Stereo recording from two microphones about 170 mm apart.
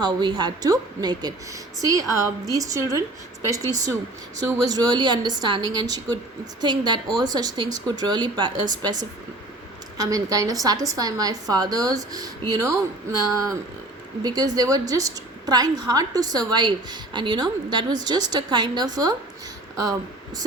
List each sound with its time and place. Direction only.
0.0 s a woman's voice: 25° right (ahead or behind)